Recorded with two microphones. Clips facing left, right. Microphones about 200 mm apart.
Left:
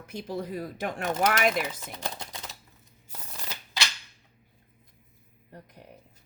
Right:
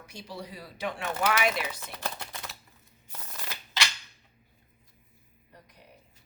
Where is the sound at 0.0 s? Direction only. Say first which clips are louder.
Left 7 dB; 55° left (ahead or behind).